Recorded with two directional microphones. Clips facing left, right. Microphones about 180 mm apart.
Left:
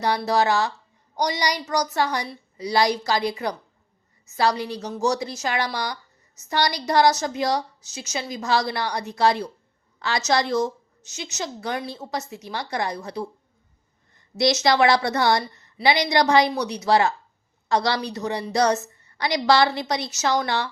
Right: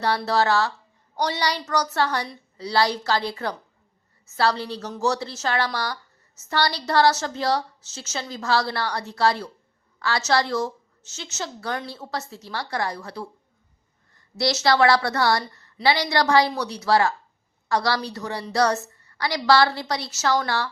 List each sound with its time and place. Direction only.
0.3 s a woman's voice: 15° left (ahead or behind)